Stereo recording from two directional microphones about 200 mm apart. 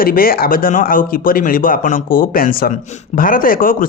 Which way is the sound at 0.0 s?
45° left (ahead or behind).